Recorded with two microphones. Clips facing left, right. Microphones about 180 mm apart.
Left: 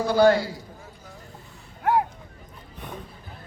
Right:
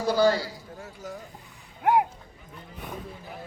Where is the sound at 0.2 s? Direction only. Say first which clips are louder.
Left 5 dB; 55° left (ahead or behind).